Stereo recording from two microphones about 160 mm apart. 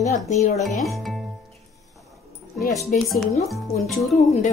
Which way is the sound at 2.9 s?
55° left (ahead or behind).